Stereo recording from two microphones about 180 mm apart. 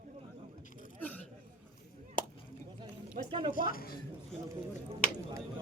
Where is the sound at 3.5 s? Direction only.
50° left (ahead or behind).